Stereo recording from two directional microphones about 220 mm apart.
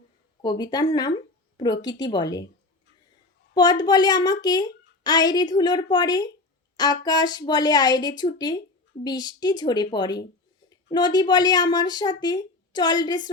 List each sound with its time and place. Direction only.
0.4 s a woman's voice: 20° left (ahead or behind)
3.5 s a woman's voice: 20° left (ahead or behind)